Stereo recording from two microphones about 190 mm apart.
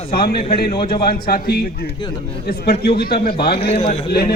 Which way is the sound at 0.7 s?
25° left (ahead or behind).